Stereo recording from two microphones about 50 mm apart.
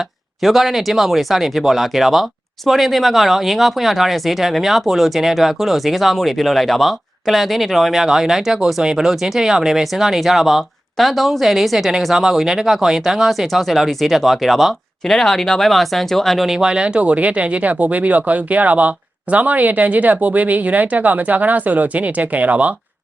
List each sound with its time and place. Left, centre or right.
0.4 s speech: centre
16.5 s speech: centre